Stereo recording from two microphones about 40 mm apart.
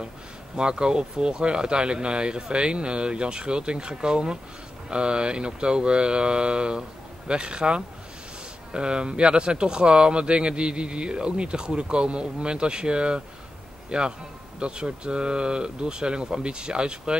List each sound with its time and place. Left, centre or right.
0.6 s a man's voice: right